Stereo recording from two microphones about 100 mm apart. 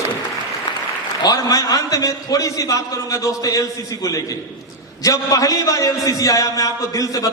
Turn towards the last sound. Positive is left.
turn(degrees=35)  # may be behind; listen again after turning